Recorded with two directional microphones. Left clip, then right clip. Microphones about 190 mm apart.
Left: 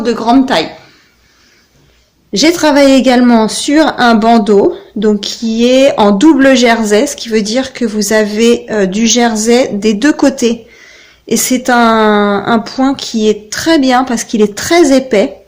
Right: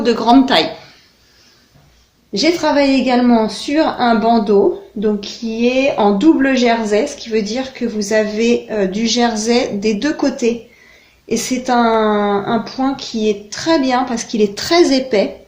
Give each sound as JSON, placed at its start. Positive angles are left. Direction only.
{"t": 0.0, "sound": "a man's voice", "side_deg": 25}
{"t": 2.3, "sound": "a woman's voice", "side_deg": 45}